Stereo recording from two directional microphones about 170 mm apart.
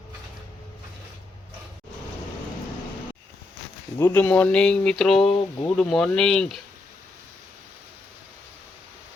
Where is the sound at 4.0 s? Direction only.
15° left (ahead or behind).